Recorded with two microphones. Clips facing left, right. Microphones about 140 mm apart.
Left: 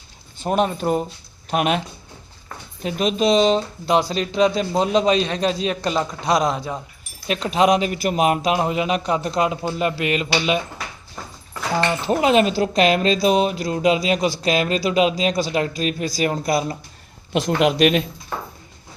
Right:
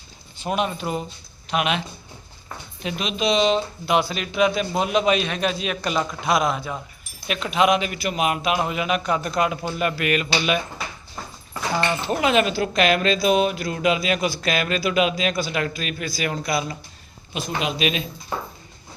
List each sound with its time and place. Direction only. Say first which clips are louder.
0.4 s speech: left 5 dB; 40° left (ahead or behind)
2.8 s a man's voice: left 5 dB; 40° left (ahead or behind); by 10.2 s 25° left (ahead or behind)
12.0 s speech: left 4 dB; 35° left (ahead or behind)
17.3 s speech: left 8 dB; 80° left; by 18.0 s 60° left (ahead or behind)